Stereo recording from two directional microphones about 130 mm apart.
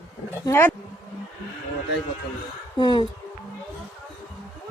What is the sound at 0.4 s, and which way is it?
Speech, 20° left (ahead or behind).